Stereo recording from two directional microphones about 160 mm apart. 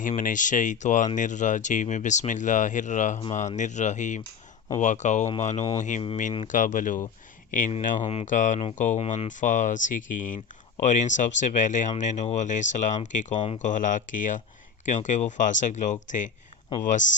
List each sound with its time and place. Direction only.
0.2 s speech: 55° left (ahead or behind)
7.9 s speech: 40° left (ahead or behind)